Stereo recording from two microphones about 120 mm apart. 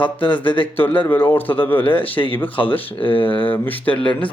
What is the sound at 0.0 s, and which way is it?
Speech, 45° left (ahead or behind).